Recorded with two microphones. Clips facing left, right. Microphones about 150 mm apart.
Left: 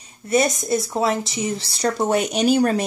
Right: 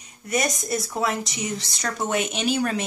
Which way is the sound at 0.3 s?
25° left (ahead or behind).